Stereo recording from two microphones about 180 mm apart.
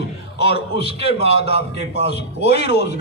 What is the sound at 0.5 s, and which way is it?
A man's voice, 30° right (ahead or behind).